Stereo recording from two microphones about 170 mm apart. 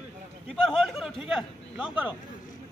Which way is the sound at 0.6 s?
Centre (ahead or behind).